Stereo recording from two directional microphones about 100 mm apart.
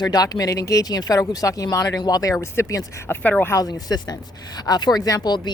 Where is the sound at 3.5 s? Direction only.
40° left (ahead or behind).